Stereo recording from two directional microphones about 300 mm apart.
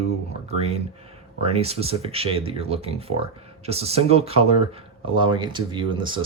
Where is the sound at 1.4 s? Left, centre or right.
Centre.